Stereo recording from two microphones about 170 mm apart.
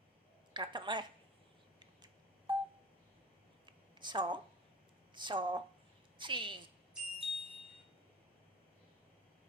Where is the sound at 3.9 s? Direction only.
25° right (ahead or behind).